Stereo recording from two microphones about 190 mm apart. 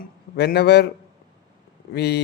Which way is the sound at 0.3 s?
55° left (ahead or behind).